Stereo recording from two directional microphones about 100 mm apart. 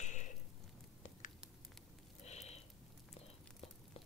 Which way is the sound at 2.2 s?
90° left.